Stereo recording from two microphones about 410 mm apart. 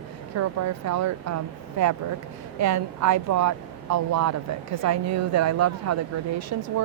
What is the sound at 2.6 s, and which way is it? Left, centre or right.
A woman's voice, right.